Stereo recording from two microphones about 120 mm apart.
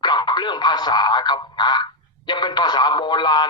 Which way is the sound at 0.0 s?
40° left (ahead or behind).